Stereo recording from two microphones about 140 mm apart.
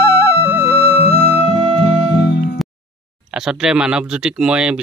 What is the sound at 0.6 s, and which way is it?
Music, 45° left (ahead or behind).